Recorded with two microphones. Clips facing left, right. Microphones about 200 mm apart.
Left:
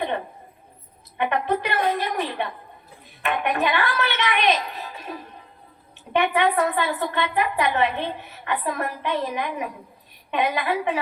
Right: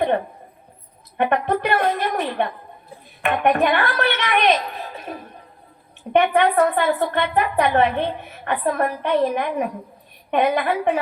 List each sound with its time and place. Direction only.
1.1 s a woman's voice: 55° right (ahead or behind)